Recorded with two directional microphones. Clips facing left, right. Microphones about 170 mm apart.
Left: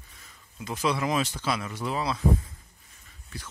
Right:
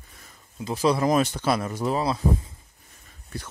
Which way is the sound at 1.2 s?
55° right (ahead or behind).